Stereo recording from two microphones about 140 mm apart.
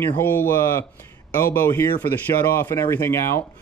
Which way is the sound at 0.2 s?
15° left (ahead or behind).